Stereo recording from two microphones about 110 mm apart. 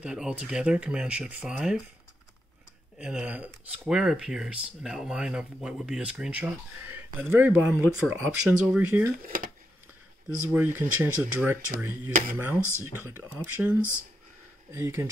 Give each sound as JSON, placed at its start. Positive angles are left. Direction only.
{"t": 0.0, "sound": "speech", "side_deg": -10}
{"t": 3.0, "sound": "speech", "side_deg": -5}
{"t": 10.5, "sound": "speech", "side_deg": -20}